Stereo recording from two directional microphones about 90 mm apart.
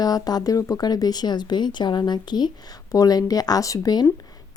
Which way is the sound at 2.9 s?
45° left (ahead or behind).